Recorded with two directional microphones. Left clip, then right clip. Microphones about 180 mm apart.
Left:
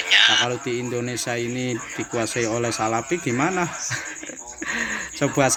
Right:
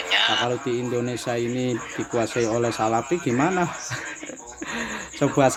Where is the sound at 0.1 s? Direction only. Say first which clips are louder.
Left 4 dB; 15° right (ahead or behind).